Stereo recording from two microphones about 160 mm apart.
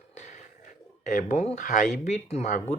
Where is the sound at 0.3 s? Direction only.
55° left (ahead or behind).